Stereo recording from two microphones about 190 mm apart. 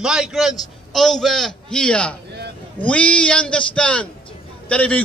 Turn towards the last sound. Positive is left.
turn(degrees=5)  # may be behind; listen again after turning